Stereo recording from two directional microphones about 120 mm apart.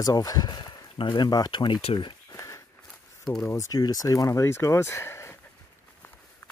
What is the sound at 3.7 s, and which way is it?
Speech, 35° left (ahead or behind).